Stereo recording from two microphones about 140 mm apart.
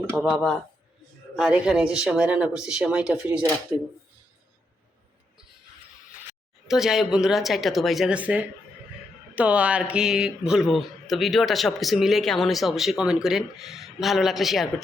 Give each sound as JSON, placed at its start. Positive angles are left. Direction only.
{"t": 0.2, "sound": "a man's voice", "side_deg": -5}
{"t": 6.7, "sound": "a man's voice", "side_deg": -5}